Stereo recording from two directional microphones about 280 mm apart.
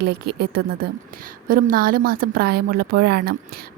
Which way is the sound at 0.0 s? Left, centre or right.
Right.